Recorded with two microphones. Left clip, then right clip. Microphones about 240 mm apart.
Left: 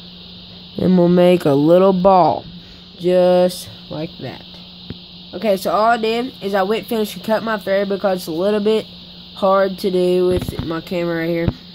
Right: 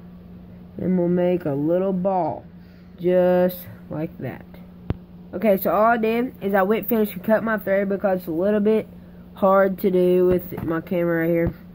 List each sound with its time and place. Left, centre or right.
0.7 s speech: centre